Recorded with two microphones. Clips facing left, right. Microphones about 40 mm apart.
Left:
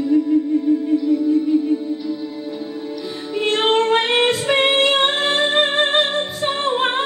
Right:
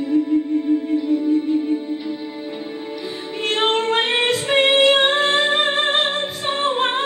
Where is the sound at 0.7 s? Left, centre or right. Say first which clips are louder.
Left 1 dB; right.